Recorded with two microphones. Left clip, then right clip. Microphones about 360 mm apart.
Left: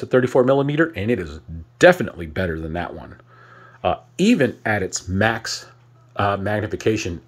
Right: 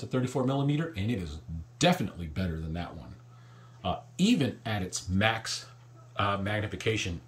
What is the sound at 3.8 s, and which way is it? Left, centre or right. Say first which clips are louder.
Speech: left 11 dB; centre.